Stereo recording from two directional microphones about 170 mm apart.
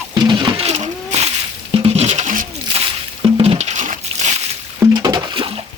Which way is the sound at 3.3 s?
35° right (ahead or behind).